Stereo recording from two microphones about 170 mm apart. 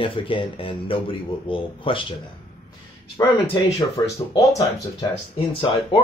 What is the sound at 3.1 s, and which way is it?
Speech, 25° left (ahead or behind).